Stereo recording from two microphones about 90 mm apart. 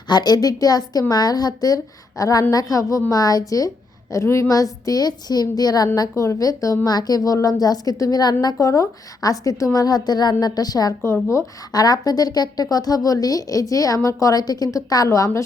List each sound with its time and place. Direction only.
0.1 s a woman's voice: 50° left (ahead or behind)
8.5 s a woman's voice: 35° left (ahead or behind)
11.0 s a woman's voice: 30° left (ahead or behind)
11.7 s a woman's voice: 45° left (ahead or behind)